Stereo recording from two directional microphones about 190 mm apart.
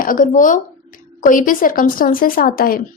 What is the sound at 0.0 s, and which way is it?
Speech, 45° left (ahead or behind).